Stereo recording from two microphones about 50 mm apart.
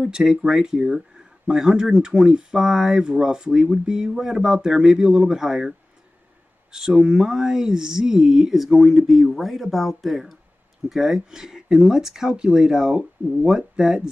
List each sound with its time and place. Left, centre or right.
0.0 s speech: centre